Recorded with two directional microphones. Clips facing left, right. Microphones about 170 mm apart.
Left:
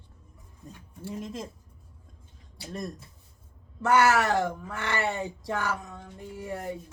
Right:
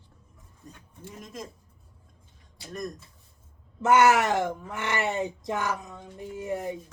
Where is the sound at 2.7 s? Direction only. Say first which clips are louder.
Right 1 dB; 30° left (ahead or behind).